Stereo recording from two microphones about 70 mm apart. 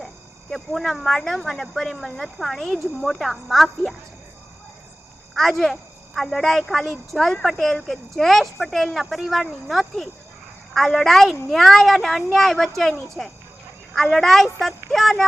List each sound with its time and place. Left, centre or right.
0.5 s speech: centre
5.3 s speech: centre